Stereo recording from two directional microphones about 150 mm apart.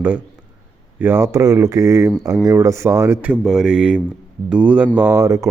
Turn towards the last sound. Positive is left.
turn(degrees=-20)  # may be behind; listen again after turning